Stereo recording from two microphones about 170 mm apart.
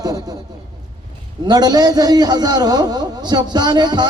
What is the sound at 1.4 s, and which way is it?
A man's voice, 25° right (ahead or behind).